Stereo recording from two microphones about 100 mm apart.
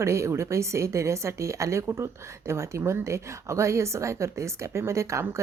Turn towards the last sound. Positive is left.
turn(degrees=-30)  # may be behind; listen again after turning